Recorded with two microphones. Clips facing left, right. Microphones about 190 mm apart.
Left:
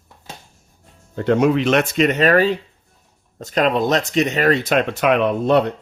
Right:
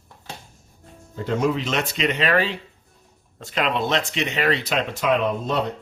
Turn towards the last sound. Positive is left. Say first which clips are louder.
# left 7 dB
turn(degrees=65)  # may be behind; listen again after turning